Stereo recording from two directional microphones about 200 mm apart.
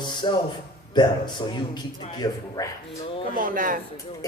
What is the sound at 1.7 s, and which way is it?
Speech, 20° left (ahead or behind).